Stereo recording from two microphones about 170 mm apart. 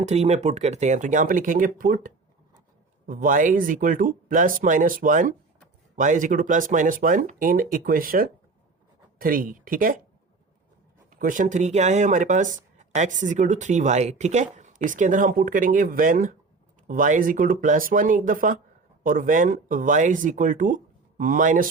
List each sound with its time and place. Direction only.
0.0 s speech: 40° right (ahead or behind)
11.1 s speech: 50° right (ahead or behind)